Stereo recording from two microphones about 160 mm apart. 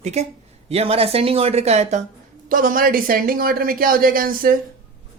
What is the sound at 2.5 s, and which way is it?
Speech, 60° right (ahead or behind).